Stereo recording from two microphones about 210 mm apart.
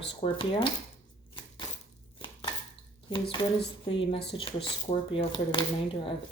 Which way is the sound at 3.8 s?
25° left (ahead or behind).